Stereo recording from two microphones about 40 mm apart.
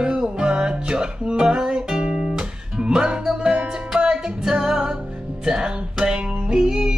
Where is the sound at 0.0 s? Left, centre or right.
Right.